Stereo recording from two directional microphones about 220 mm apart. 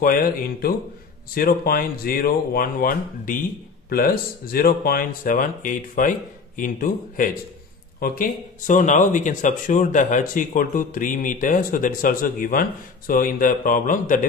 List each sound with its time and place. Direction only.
0.0 s speech: 40° left (ahead or behind)